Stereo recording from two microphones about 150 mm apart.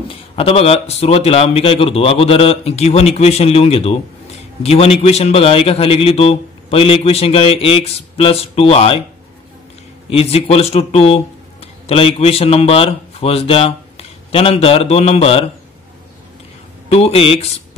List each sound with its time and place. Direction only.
0.1 s a man's voice: 40° left (ahead or behind)
10.1 s speech: 40° left (ahead or behind)
16.9 s a man's voice: 40° left (ahead or behind)